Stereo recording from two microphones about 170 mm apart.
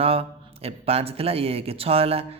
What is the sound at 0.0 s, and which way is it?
Speech, 35° right (ahead or behind).